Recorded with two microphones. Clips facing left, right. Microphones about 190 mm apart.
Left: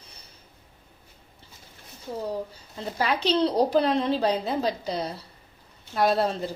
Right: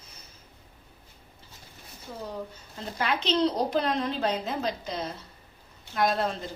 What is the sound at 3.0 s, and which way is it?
A woman's voice, 35° left (ahead or behind).